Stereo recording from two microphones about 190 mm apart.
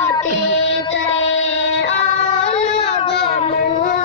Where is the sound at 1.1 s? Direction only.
35° left (ahead or behind).